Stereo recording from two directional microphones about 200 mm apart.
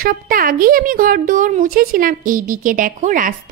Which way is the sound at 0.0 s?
45° right (ahead or behind).